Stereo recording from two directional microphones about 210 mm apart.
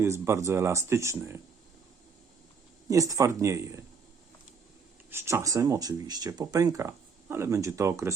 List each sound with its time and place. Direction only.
0.0 s speech: 15° right (ahead or behind)
2.9 s speech: 15° right (ahead or behind)
5.1 s speech: 15° right (ahead or behind)